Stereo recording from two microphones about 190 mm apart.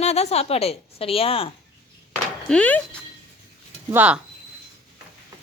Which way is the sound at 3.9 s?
10° right (ahead or behind).